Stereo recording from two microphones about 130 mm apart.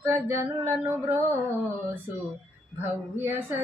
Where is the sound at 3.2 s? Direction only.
20° right (ahead or behind).